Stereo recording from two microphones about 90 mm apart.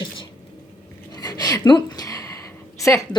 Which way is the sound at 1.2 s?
45° left (ahead or behind).